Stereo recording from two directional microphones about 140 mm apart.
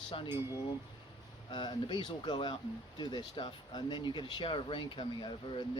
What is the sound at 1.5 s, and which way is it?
Speech, 30° left (ahead or behind).